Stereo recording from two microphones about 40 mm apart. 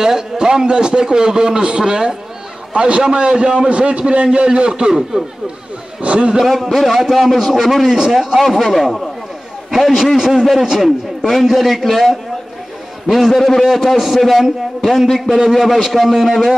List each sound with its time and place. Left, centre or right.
0.0 s a man's voice: centre
6.4 s a man's voice: centre
13.1 s a man's voice: centre